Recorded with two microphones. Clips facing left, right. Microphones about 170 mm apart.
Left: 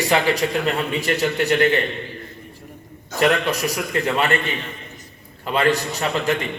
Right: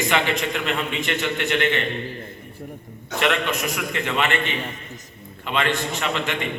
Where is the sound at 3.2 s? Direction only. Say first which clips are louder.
Left 4 dB; 40° left (ahead or behind).